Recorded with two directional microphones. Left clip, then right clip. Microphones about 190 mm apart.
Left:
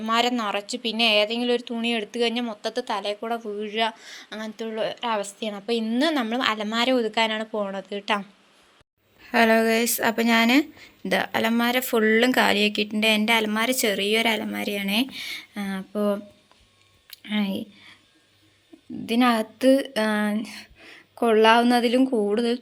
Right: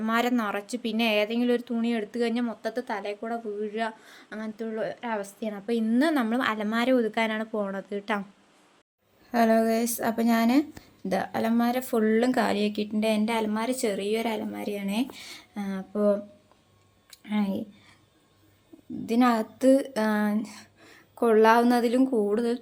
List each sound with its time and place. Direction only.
0.0 s a woman's voice: 20° right (ahead or behind)
9.2 s speech: centre (ahead or behind)
17.2 s speech: centre (ahead or behind)
19.0 s speech: centre (ahead or behind)